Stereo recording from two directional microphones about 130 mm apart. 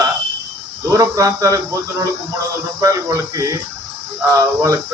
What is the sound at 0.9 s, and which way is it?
Speech, 25° right (ahead or behind).